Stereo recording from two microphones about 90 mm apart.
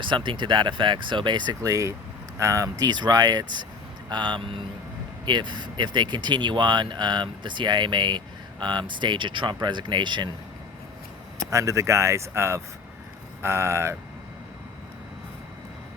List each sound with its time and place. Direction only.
0.0 s speech: 65° right (ahead or behind)
5.2 s speech: 60° right (ahead or behind)
11.5 s speech: 35° right (ahead or behind)